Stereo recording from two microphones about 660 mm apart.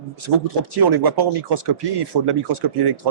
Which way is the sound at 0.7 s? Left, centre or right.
Right.